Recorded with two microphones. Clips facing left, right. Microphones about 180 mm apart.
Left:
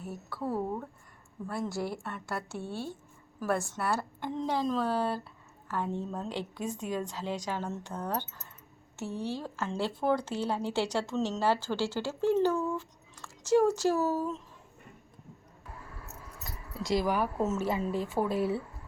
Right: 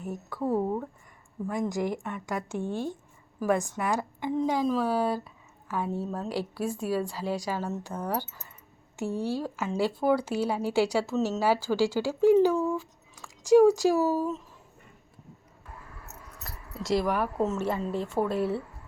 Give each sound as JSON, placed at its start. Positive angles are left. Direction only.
{"t": 0.0, "sound": "speech", "side_deg": -15}
{"t": 16.4, "sound": "keys jangling", "side_deg": 0}
{"t": 16.8, "sound": "speech", "side_deg": 0}